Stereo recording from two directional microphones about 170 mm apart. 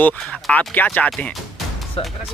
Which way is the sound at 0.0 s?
5° left (ahead or behind).